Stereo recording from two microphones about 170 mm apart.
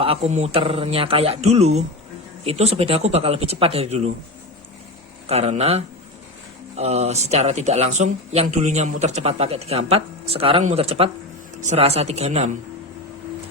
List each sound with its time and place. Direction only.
0.0 s speech: 35° right (ahead or behind)
5.2 s speech: 40° right (ahead or behind)